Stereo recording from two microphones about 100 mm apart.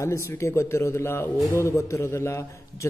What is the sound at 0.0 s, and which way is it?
A man's voice, 30° left (ahead or behind).